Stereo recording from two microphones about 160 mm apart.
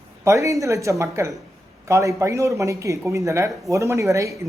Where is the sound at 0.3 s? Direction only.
20° right (ahead or behind).